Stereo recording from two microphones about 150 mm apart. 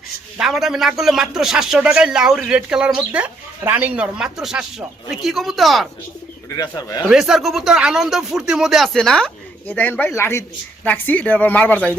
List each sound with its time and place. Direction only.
0.3 s a man's voice: 5° right (ahead or behind)
6.5 s speech: 20° left (ahead or behind)
7.1 s a man's voice: 5° right (ahead or behind)